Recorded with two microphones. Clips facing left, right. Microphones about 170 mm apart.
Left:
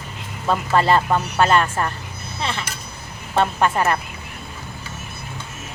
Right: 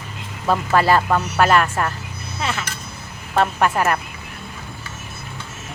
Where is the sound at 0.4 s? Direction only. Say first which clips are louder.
Right 1 dB; 5° right (ahead or behind).